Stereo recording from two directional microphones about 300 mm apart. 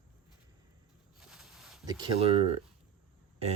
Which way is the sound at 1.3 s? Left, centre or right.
Centre.